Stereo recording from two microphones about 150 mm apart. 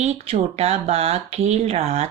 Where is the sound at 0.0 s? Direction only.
45° right (ahead or behind).